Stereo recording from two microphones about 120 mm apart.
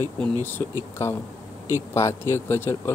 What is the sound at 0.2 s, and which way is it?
Speech, 15° left (ahead or behind).